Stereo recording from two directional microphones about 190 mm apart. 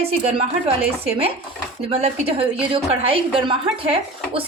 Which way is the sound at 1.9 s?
30° right (ahead or behind).